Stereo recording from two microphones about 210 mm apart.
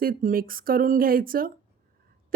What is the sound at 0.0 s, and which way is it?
A woman's voice, 40° right (ahead or behind).